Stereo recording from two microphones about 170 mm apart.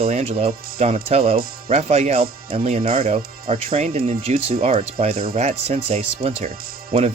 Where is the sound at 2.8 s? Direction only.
60° right (ahead or behind).